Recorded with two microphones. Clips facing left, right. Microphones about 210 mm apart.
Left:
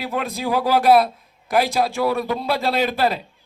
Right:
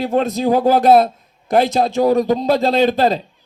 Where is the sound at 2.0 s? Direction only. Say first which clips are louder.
Right 11 dB; 40° right (ahead or behind).